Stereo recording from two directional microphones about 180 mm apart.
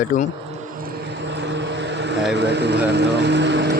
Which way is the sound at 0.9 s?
70° right (ahead or behind).